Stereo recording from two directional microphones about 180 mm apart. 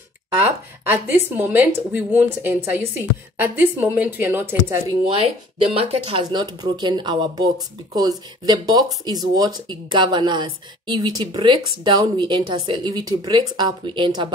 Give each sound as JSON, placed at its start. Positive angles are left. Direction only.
{"t": 0.8, "sound": "speech", "side_deg": -10}
{"t": 5.0, "sound": "speech", "side_deg": -30}